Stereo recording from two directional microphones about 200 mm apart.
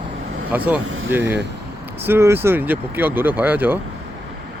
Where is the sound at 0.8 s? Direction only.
90° right.